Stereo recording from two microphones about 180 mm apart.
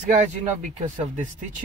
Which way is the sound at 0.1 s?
40° right (ahead or behind).